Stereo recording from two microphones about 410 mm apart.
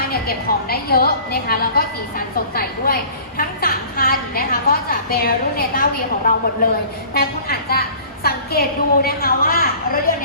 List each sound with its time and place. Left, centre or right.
0.0 s a woman's voice: left